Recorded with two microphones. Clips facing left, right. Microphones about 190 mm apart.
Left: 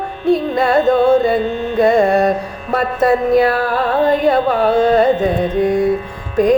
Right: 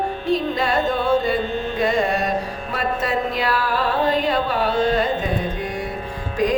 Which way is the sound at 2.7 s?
55° left (ahead or behind).